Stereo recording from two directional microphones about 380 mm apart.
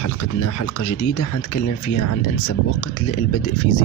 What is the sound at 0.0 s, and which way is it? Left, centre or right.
Speech, left.